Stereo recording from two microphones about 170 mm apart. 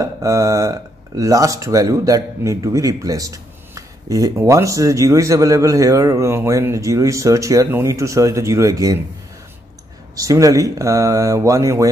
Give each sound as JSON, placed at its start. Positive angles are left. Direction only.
{"t": 0.0, "sound": "speech", "side_deg": -20}
{"t": 10.1, "sound": "speech", "side_deg": -20}